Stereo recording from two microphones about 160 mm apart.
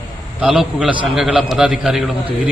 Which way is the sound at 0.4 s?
5° right (ahead or behind).